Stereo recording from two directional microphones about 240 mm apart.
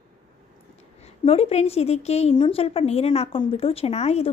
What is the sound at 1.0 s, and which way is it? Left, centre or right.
A woman's voice, left.